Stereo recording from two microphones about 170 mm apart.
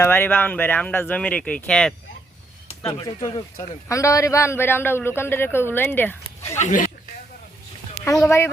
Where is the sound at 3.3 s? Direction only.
45° left (ahead or behind).